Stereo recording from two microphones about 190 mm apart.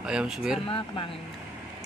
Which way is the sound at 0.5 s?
30° left (ahead or behind).